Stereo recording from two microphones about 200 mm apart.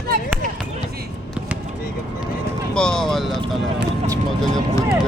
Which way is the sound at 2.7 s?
5° left (ahead or behind).